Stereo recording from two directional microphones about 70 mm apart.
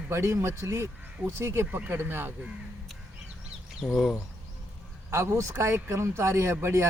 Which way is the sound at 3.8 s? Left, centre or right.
Centre.